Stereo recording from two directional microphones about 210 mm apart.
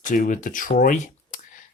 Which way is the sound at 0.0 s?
40° left (ahead or behind).